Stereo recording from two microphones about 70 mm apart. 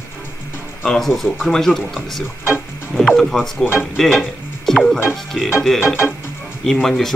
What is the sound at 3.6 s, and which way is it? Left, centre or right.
Speech, left.